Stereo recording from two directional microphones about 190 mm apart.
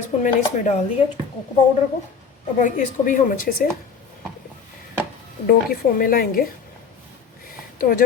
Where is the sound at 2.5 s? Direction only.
40° left (ahead or behind).